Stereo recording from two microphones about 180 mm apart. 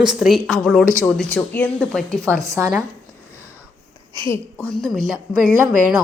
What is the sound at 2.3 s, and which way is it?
Speech, 15° right (ahead or behind).